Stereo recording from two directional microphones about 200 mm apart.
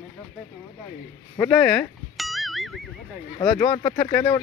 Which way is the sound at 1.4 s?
5° left (ahead or behind).